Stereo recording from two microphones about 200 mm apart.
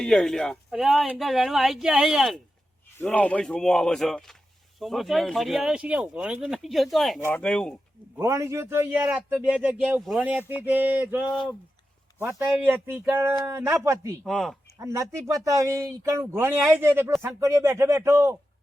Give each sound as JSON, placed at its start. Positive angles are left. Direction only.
{"t": 0.0, "sound": "speech", "side_deg": 5}
{"t": 8.2, "sound": "a man's voice", "side_deg": -15}
{"t": 12.2, "sound": "a man's voice", "side_deg": -10}
{"t": 14.3, "sound": "speech", "side_deg": 0}
{"t": 14.8, "sound": "a man's voice", "side_deg": -15}